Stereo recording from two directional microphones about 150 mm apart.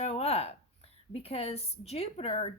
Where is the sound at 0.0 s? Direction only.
45° left (ahead or behind).